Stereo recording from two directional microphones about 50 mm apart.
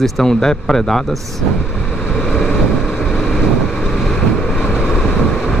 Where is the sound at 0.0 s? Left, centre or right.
Centre.